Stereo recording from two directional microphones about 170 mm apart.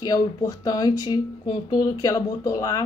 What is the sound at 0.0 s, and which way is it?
A woman's voice, 20° left (ahead or behind).